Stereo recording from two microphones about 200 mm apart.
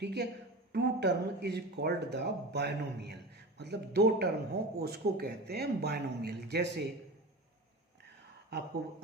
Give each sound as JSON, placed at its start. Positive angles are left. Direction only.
{"t": 0.0, "sound": "a man's voice", "side_deg": -55}